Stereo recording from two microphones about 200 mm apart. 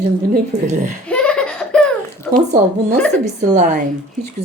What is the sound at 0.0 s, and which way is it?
Speech, 40° right (ahead or behind).